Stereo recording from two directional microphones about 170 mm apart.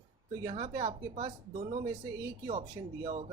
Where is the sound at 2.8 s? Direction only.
25° right (ahead or behind).